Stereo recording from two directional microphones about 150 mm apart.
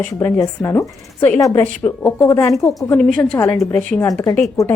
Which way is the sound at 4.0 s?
20° left (ahead or behind).